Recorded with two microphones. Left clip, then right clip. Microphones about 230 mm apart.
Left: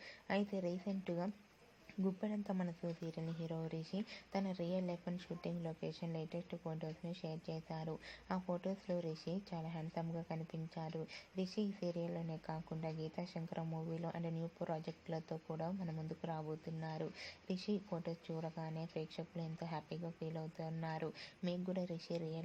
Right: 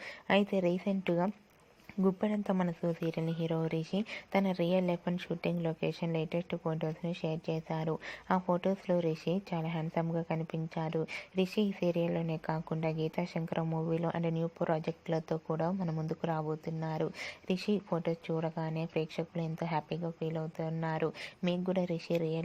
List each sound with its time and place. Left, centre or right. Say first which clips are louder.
0.0 s a woman's voice: right 11 dB; right